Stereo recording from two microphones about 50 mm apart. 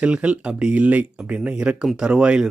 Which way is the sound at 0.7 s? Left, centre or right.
Right.